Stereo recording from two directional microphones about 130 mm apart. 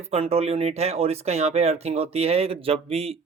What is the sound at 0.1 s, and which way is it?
Speech, 50° right (ahead or behind).